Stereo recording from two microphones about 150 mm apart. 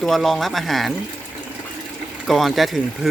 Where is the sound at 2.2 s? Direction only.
Centre (ahead or behind).